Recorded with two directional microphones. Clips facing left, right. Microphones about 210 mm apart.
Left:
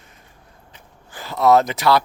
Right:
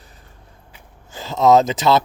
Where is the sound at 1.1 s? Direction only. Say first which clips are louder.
Right 2 dB; 20° right (ahead or behind).